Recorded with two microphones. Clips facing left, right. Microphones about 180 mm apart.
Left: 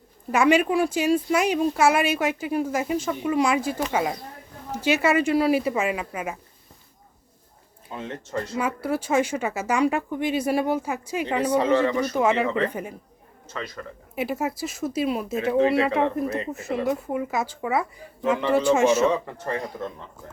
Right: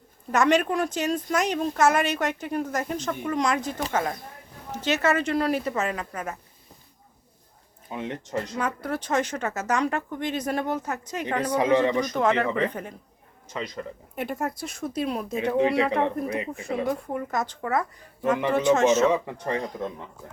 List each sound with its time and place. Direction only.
0.3 s speech: 10° left (ahead or behind)
7.9 s speech: 15° right (ahead or behind)
8.5 s speech: 10° left (ahead or behind)
11.5 s speech: 15° right (ahead or behind)
12.1 s speech: 10° left (ahead or behind)
12.5 s speech: 10° right (ahead or behind)
12.7 s speech: 10° left (ahead or behind)
13.5 s speech: 15° right (ahead or behind)
14.2 s speech: 5° left (ahead or behind)
15.5 s speech: 15° right (ahead or behind)
16.5 s speech: 5° left (ahead or behind)
19.1 s speech: 15° right (ahead or behind)